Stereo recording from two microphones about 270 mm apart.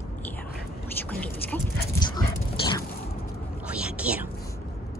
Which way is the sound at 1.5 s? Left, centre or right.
Centre.